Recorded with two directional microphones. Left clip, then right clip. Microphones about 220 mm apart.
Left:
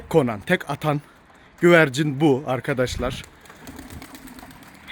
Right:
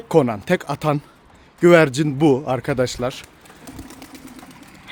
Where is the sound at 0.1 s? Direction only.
10° right (ahead or behind).